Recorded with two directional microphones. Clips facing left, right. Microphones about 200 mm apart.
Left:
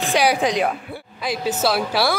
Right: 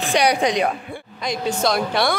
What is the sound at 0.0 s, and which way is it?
A woman's voice, centre (ahead or behind).